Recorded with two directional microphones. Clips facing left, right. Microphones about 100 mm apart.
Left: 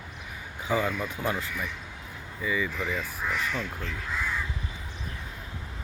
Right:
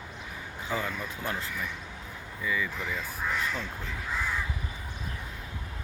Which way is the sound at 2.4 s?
5° left (ahead or behind).